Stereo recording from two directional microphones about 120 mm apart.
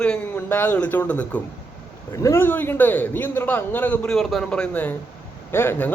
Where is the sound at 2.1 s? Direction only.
25° left (ahead or behind).